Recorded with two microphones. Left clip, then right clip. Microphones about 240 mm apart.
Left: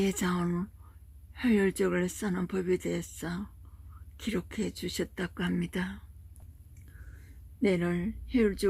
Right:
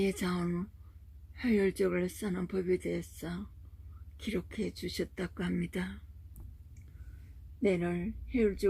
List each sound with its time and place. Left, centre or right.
0.0 s speech: centre
7.6 s speech: left